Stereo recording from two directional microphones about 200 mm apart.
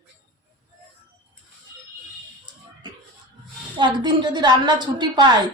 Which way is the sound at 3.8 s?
20° right (ahead or behind).